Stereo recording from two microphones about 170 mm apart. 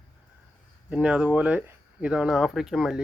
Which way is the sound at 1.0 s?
5° right (ahead or behind).